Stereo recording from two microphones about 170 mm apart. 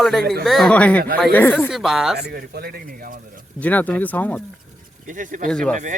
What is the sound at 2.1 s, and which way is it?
Speech, 65° right (ahead or behind).